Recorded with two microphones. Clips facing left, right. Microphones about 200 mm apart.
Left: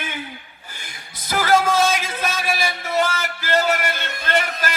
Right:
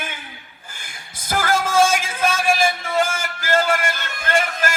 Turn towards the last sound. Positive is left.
turn(degrees=-50)  # may be behind; listen again after turning